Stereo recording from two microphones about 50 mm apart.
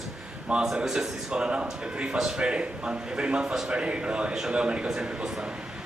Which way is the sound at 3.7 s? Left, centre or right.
Right.